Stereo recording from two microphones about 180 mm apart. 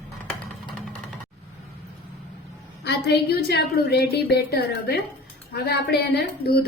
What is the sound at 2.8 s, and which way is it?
A woman's voice, 65° left (ahead or behind).